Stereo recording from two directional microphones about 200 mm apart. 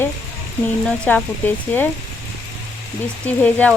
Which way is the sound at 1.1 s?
10° left (ahead or behind).